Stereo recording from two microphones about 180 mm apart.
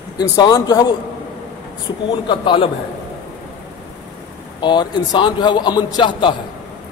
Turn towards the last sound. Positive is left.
turn(degrees=25)  # may be behind; listen again after turning